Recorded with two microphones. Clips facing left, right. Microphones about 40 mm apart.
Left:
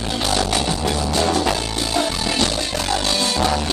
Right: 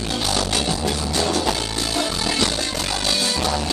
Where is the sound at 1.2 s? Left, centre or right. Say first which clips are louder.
Left 2 dB; left.